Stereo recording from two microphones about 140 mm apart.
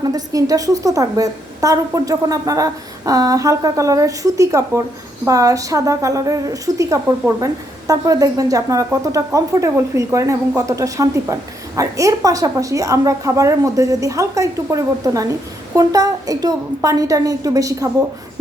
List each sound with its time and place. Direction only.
0.0 s a woman's voice: 25° right (ahead or behind)